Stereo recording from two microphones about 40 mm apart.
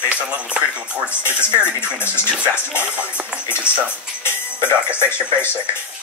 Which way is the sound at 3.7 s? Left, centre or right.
Left.